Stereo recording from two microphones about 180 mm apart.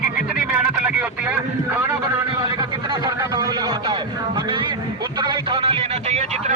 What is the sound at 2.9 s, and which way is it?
Speech, 20° right (ahead or behind).